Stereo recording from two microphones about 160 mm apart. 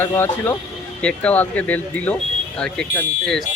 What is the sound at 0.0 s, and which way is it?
Speech, 15° left (ahead or behind).